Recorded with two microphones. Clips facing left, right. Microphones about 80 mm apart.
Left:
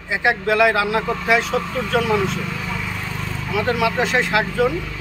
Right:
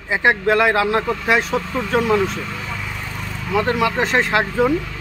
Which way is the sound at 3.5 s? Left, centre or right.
Right.